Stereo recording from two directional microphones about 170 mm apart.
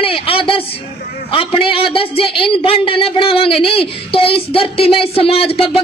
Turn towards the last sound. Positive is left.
turn(degrees=35)  # may be behind; listen again after turning